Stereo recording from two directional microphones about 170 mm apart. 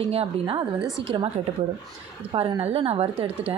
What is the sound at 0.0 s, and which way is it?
A woman's voice, 35° right (ahead or behind).